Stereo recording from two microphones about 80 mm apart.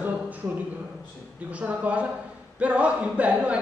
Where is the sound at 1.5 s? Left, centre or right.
Centre.